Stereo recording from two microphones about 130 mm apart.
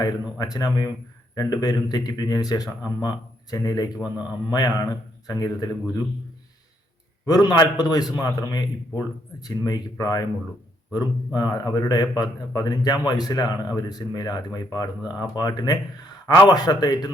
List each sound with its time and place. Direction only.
0.0 s speech: 30° left (ahead or behind)
3.9 s a man's voice: 10° right (ahead or behind)
4.5 s speech: 30° left (ahead or behind)
7.3 s speech: 30° left (ahead or behind)